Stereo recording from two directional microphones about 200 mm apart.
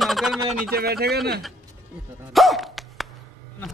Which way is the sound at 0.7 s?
50° right (ahead or behind).